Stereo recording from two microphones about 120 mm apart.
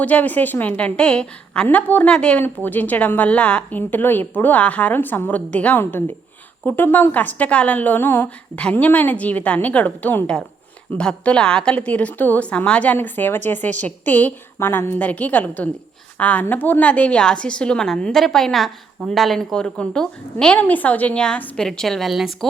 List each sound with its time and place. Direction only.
0.0 s a woman's voice: 15° left (ahead or behind)